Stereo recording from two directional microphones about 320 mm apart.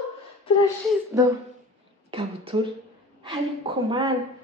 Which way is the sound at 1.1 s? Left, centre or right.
Centre.